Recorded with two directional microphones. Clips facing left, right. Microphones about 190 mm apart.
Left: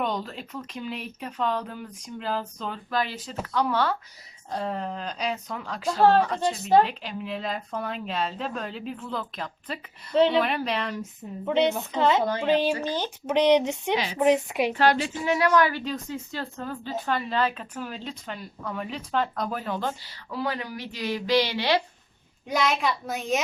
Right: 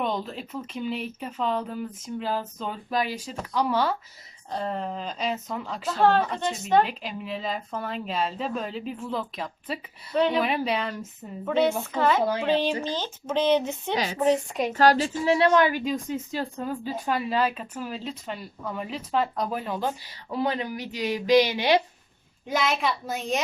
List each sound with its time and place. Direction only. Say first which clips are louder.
0.0 s speech: right 1 dB; centre (ahead or behind)
6.8 s speech: left 1 dB; centre (ahead or behind)
11.4 s speech: even; 20° left (ahead or behind)
12.2 s speech: right 1 dB; 5° right (ahead or behind)
12.5 s speech: left 1 dB; 10° left (ahead or behind)
13.9 s a woman's voice: right 1 dB; 40° right (ahead or behind)
14.2 s speech: left 2 dB; 10° left (ahead or behind)
14.7 s a woman's voice: right 4 dB; 40° right (ahead or behind); by 15.8 s 20° right (ahead or behind)
15.8 s speech: right 3 dB; 10° right (ahead or behind)
20.3 s speech: right 3 dB; 20° right (ahead or behind)
22.4 s speech: even; centre (ahead or behind)